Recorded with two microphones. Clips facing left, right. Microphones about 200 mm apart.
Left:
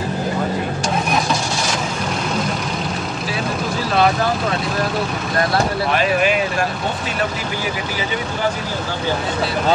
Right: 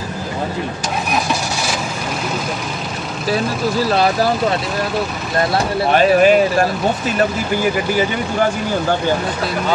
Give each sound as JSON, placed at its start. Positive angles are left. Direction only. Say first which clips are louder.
{"t": 5.9, "sound": "speech", "louder": "right 10 dB", "side_deg": -40}